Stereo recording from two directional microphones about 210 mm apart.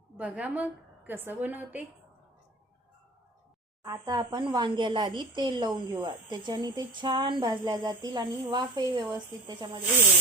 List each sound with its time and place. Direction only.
0.2 s a woman's voice: 5° right (ahead or behind)
3.8 s speech: 20° right (ahead or behind)